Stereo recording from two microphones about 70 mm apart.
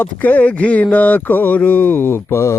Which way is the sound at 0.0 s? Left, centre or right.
Left.